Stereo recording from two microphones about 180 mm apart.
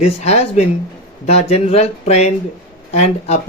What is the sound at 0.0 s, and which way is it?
Speech, 35° left (ahead or behind).